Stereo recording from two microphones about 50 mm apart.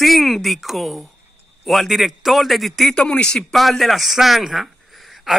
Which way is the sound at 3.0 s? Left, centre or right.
Centre.